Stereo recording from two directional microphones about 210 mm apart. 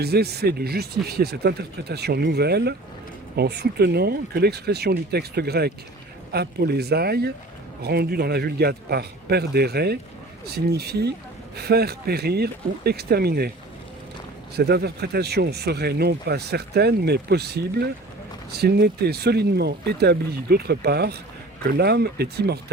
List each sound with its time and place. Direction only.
0.0 s speech: 50° right (ahead or behind)
14.5 s speech: 50° right (ahead or behind)